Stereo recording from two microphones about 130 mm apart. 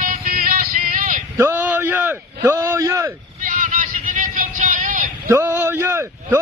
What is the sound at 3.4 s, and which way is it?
Vehicle, 90° right.